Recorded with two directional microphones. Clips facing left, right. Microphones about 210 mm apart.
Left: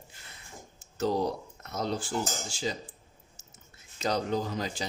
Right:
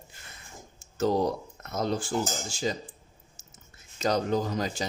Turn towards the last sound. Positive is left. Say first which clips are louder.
# right 3 dB
turn(degrees=-45)  # may be behind; listen again after turning